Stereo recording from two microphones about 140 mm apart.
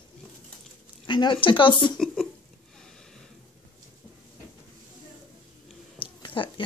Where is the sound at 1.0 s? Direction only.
35° left (ahead or behind).